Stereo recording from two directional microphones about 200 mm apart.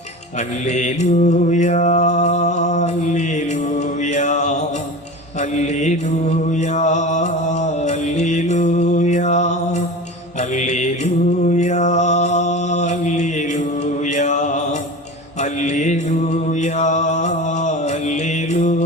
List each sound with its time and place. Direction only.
0.3 s mantra: 35° left (ahead or behind)
6.4 s music: 35° left (ahead or behind)
10.5 s mantra: 35° left (ahead or behind)